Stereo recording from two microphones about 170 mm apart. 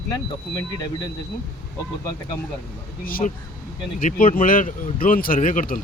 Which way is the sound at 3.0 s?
55° left (ahead or behind).